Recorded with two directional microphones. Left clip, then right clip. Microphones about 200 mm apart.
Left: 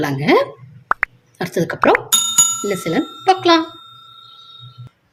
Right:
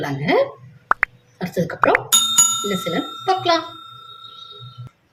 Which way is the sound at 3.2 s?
55° left (ahead or behind).